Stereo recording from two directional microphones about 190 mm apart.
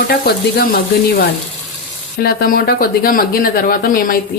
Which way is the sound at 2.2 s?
55° left (ahead or behind).